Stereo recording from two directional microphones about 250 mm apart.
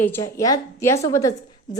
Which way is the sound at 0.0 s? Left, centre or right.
Centre.